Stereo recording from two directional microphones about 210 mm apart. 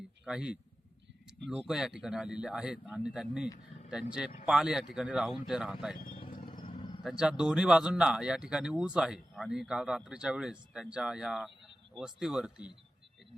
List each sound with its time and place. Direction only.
0.3 s speech: 5° right (ahead or behind)
6.4 s vehicle: 25° left (ahead or behind)
6.7 s a sound: 25° left (ahead or behind)
7.0 s speech: centre (ahead or behind)